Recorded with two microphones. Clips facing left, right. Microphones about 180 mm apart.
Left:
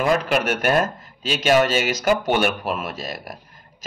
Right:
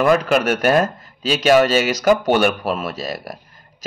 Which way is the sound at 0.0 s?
55° right (ahead or behind).